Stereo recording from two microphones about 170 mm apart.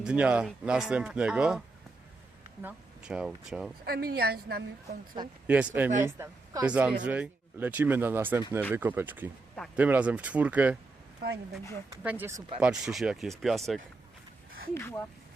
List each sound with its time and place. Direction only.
0.0 s speech: 5° right (ahead or behind)
3.8 s a woman's voice: 65° right (ahead or behind)
5.5 s speech: 10° right (ahead or behind)
6.7 s speech: 10° right (ahead or behind)
11.2 s speech: 70° right (ahead or behind)
12.0 s speech: 10° right (ahead or behind)
14.7 s speech: 15° left (ahead or behind)